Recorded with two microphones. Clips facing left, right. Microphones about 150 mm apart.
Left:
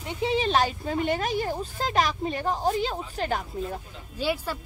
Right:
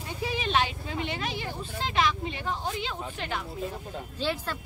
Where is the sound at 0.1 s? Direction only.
25° left (ahead or behind).